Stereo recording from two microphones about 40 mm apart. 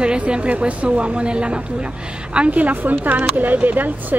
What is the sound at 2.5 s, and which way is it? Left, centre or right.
A woman's voice, right.